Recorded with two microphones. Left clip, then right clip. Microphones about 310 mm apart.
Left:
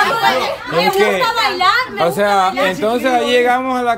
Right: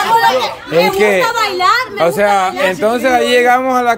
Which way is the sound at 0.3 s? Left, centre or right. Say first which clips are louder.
Right 2 dB; centre.